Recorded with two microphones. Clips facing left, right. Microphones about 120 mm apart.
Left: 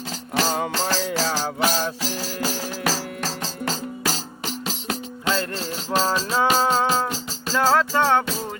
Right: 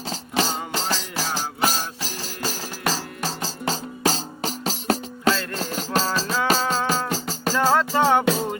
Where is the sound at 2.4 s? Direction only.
5° left (ahead or behind).